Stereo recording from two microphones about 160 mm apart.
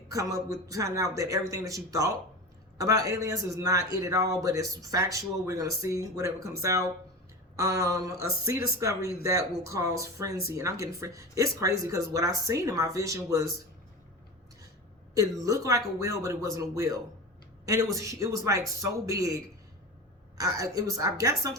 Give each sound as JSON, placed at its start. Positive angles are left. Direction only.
{"t": 0.1, "sound": "a man's voice", "side_deg": -20}
{"t": 15.1, "sound": "a man's voice", "side_deg": -20}
{"t": 20.4, "sound": "a man's voice", "side_deg": -20}